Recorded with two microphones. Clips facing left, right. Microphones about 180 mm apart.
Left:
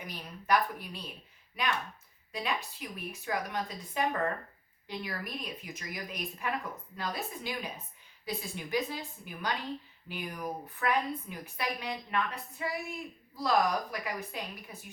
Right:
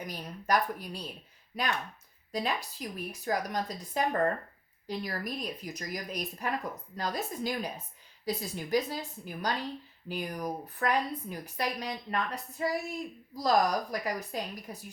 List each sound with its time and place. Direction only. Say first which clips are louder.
0.0 s a woman's voice: right 4 dB; 40° right (ahead or behind)